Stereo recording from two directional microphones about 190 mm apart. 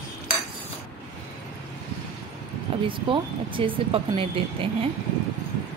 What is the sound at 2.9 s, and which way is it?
Speech, 25° right (ahead or behind).